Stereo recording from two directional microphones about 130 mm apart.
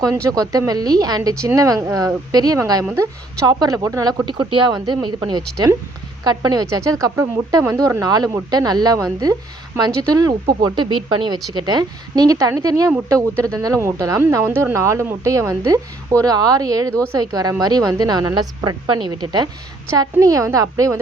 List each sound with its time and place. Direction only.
0.0 s a woman's voice: 25° right (ahead or behind)